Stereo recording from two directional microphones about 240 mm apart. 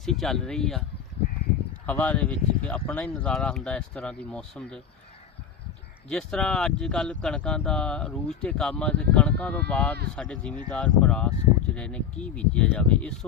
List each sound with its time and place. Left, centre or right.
0.0 s speech: centre
1.9 s speech: centre
6.1 s speech: centre